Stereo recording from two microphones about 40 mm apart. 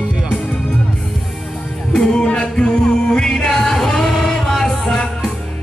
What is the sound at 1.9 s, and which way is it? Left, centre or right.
Music, left.